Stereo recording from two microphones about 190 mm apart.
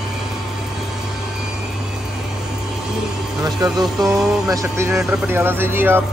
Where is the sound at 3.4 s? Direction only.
20° right (ahead or behind).